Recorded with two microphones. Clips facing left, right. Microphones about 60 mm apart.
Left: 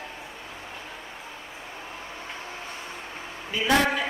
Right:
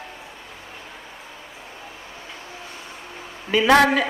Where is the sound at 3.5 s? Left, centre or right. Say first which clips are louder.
Right 7 dB; right.